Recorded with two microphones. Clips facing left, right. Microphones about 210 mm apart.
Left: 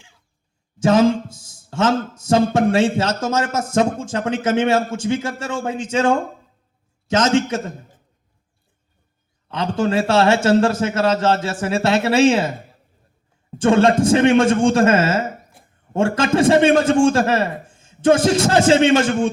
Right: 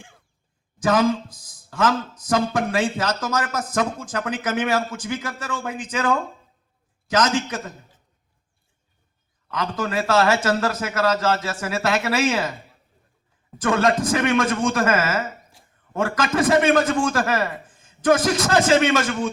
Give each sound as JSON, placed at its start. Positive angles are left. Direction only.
{"t": 0.8, "sound": "a man's voice", "side_deg": 25}
{"t": 7.7, "sound": "a sound", "side_deg": 50}
{"t": 9.5, "sound": "a man's voice", "side_deg": 30}
{"t": 13.6, "sound": "a man's voice", "side_deg": 25}
{"t": 15.6, "sound": "a sound", "side_deg": 55}
{"t": 15.9, "sound": "a man's voice", "side_deg": 30}